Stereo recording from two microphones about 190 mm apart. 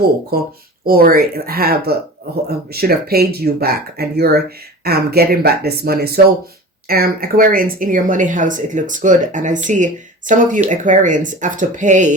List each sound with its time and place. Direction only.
0.3 s speech: 55° right (ahead or behind)